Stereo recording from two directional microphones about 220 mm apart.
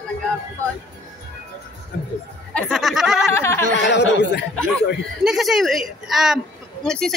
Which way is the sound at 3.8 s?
50° left (ahead or behind).